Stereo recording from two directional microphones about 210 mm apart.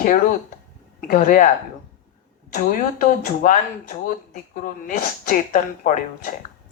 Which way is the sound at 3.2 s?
40° left (ahead or behind).